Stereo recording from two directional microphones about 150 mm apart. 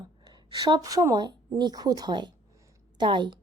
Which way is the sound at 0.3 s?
25° right (ahead or behind).